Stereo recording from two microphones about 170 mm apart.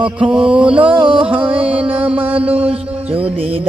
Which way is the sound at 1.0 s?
30° right (ahead or behind).